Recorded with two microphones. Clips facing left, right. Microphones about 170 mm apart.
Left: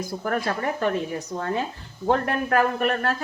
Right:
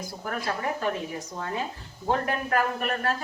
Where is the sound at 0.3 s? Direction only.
55° left (ahead or behind).